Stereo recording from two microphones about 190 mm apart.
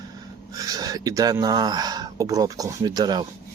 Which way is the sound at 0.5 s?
20° right (ahead or behind).